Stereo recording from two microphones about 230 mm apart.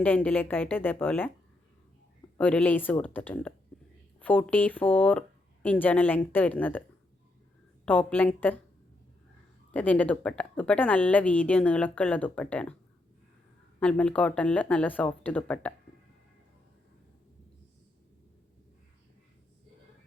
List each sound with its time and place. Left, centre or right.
0.0 s a woman's voice: centre
2.4 s a woman's voice: centre
7.9 s a woman's voice: centre
9.7 s a woman's voice: centre
13.7 s speech: centre